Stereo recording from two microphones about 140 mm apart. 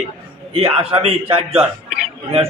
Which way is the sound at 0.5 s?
45° right (ahead or behind).